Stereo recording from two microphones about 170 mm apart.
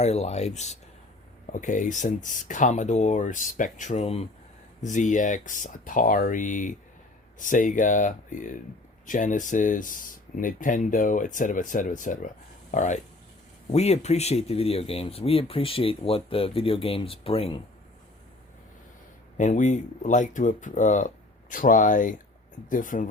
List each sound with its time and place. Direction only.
0.0 s speech: 40° left (ahead or behind)
19.4 s speech: 45° left (ahead or behind)